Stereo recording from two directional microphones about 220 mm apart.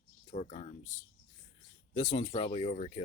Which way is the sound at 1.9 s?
25° left (ahead or behind).